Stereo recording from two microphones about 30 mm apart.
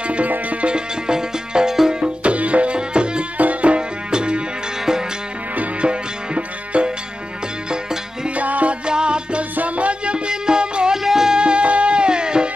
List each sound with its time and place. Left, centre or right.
0.0 s music: right
0.7 s music: right
2.2 s music: right
3.3 s music: right
3.7 s music: right
5.8 s music: right
8.4 s music: right
8.8 s music: right
9.7 s music: right
10.1 s music: right
11.0 s music: centre
11.3 s music: right